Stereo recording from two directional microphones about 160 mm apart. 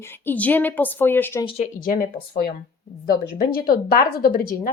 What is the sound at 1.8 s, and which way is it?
Speech, 65° left (ahead or behind).